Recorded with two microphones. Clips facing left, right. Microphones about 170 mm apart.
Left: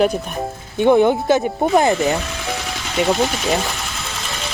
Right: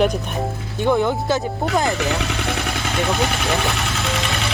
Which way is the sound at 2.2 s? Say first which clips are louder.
Right 2 dB; 65° right (ahead or behind).